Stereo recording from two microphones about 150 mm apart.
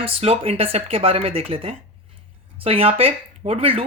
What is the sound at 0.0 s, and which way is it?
Speech, 40° right (ahead or behind).